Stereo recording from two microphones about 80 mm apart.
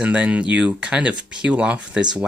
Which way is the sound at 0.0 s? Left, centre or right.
Centre.